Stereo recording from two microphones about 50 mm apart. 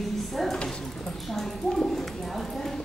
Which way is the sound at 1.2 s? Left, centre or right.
Centre.